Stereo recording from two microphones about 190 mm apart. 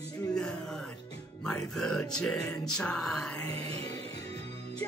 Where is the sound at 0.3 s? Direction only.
5° left (ahead or behind).